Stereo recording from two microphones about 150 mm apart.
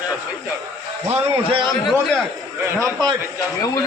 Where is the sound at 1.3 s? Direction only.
35° right (ahead or behind).